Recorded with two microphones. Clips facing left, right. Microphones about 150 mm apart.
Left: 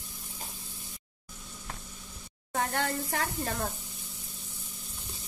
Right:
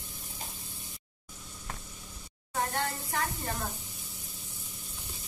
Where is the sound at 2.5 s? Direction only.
75° left (ahead or behind).